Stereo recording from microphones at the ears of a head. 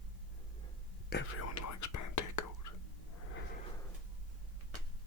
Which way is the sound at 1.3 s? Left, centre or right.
Left.